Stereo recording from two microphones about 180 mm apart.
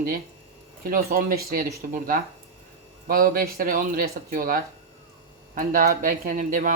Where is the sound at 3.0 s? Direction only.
55° right (ahead or behind).